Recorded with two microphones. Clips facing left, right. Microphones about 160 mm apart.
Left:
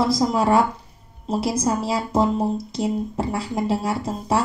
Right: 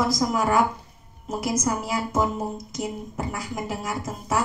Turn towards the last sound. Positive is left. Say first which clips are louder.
# left 5 dB
turn(degrees=30)  # may be behind; listen again after turning